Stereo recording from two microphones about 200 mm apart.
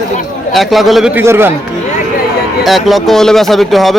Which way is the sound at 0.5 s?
Centre (ahead or behind).